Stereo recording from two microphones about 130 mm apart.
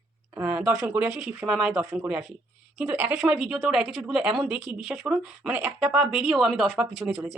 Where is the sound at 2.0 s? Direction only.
15° right (ahead or behind).